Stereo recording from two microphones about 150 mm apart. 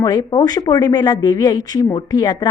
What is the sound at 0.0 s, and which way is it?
A woman's voice, 25° left (ahead or behind).